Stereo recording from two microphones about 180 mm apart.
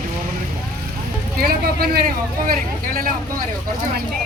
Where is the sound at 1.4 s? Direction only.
55° right (ahead or behind).